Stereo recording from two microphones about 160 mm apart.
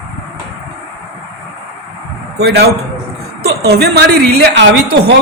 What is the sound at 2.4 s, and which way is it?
A man's voice, 85° right.